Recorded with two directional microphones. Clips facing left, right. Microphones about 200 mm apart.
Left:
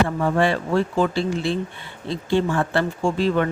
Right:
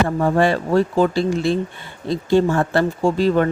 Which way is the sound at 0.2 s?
40° right (ahead or behind).